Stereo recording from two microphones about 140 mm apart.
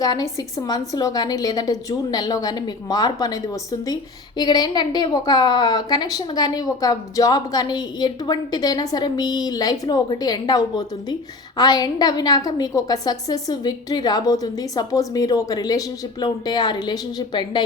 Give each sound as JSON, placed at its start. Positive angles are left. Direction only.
{"t": 0.0, "sound": "a woman's voice", "side_deg": 25}